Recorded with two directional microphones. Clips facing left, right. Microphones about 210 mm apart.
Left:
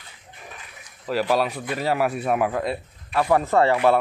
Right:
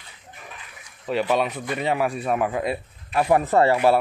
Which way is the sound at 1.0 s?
Centre (ahead or behind).